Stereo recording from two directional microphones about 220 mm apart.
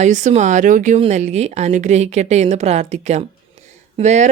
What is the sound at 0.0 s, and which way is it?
Speech, 35° right (ahead or behind).